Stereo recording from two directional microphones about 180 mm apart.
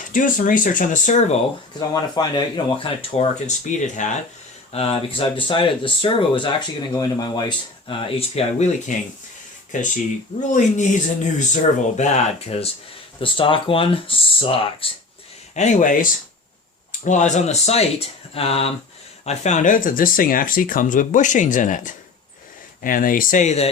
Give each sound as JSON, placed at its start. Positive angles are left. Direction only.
{"t": 0.1, "sound": "speech", "side_deg": 45}
{"t": 1.9, "sound": "speech", "side_deg": 25}
{"t": 8.4, "sound": "speech", "side_deg": 40}
{"t": 10.4, "sound": "speech", "side_deg": 45}
{"t": 15.5, "sound": "speech", "side_deg": 45}